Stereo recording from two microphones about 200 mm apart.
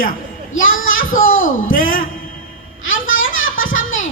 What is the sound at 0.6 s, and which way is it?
A man's voice, 75° left (ahead or behind).